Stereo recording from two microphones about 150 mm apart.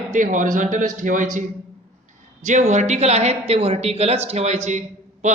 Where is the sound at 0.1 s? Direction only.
60° right (ahead or behind).